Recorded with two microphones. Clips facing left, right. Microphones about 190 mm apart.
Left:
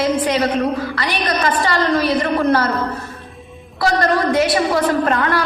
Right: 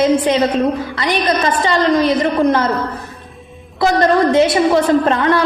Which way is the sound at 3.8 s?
25° right (ahead or behind).